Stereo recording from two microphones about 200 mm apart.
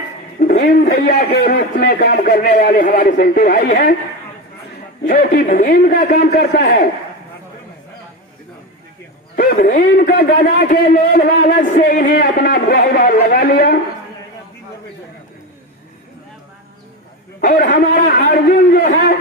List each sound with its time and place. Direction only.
0.3 s a man's voice: 45° left (ahead or behind)
5.0 s a man's voice: 50° left (ahead or behind)
9.3 s a man's voice: 45° left (ahead or behind)
17.4 s a man's voice: 50° left (ahead or behind)